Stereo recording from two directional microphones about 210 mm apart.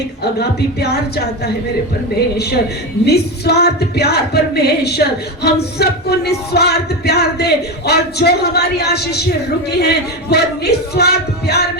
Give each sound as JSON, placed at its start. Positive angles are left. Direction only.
{"t": 3.1, "sound": "speech", "side_deg": 50}